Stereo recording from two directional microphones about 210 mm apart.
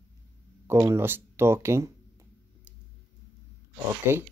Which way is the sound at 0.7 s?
15° right (ahead or behind).